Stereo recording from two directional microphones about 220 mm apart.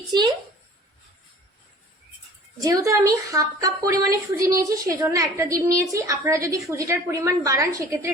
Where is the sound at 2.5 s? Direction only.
15° right (ahead or behind).